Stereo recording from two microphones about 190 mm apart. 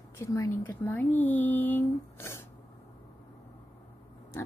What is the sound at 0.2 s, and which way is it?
Speech, 15° left (ahead or behind).